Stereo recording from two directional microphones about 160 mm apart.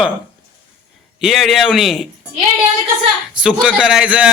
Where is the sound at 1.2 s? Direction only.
Centre (ahead or behind).